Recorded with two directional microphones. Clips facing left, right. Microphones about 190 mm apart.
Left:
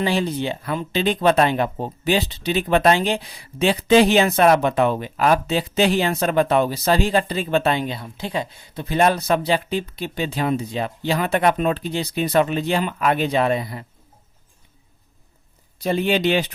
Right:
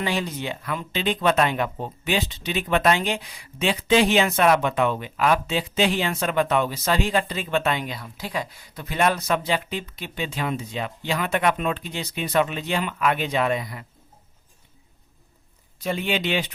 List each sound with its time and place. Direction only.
0.0 s speech: 30° left (ahead or behind)
15.8 s speech: 35° left (ahead or behind)